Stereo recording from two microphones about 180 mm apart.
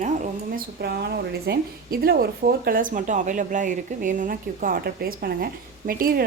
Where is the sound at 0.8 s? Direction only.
65° right (ahead or behind).